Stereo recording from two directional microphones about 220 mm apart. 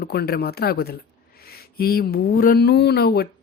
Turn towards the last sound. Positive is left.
turn(degrees=45)  # may be behind; listen again after turning